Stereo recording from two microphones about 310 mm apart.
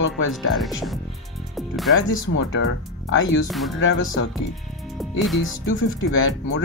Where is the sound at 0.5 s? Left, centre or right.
Centre.